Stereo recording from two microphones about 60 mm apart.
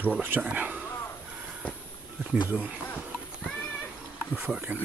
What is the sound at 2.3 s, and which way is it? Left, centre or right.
Speech, right.